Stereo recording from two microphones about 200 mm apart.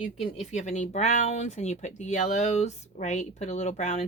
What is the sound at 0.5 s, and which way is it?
Speech, 35° left (ahead or behind).